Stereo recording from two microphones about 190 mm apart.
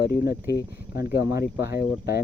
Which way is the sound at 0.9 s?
55° left (ahead or behind).